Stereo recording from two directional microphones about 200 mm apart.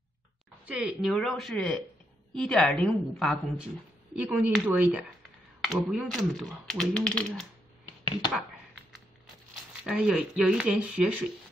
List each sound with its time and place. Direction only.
0.7 s speech: 5° right (ahead or behind)
9.8 s speech: 5° right (ahead or behind)